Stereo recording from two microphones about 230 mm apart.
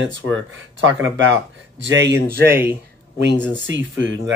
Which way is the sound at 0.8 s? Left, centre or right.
Right.